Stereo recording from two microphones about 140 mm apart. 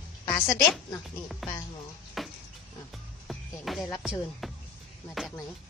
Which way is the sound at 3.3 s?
Centre (ahead or behind).